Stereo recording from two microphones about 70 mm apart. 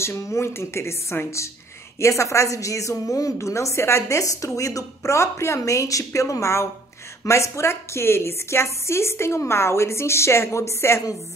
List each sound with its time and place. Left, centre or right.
0.0 s a woman's voice: left